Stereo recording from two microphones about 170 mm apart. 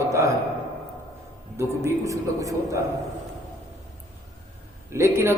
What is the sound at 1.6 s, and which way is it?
A man's voice, 15° right (ahead or behind).